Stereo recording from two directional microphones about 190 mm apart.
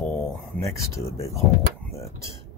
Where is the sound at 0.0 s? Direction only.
10° left (ahead or behind).